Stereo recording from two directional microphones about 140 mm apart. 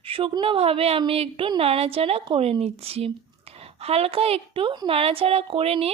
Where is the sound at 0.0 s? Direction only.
40° right (ahead or behind).